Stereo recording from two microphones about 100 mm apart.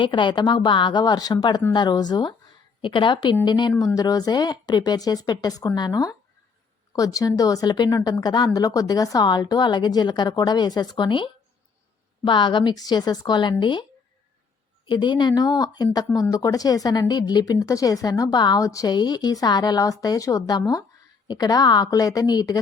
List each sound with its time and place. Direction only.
0.0 s a woman's voice: 55° left (ahead or behind)
2.8 s a woman's voice: 55° left (ahead or behind)
14.8 s a woman's voice: 50° left (ahead or behind)